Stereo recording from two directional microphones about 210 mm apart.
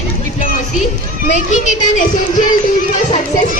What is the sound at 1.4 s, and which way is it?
A child's voice, 35° left (ahead or behind).